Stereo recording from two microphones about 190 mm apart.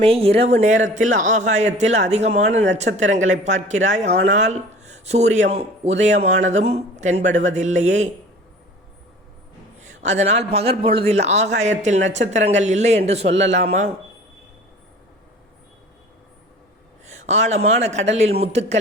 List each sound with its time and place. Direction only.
0.0 s speech: 30° right (ahead or behind)
9.8 s speech: 35° right (ahead or behind)
17.1 s speech: 35° right (ahead or behind)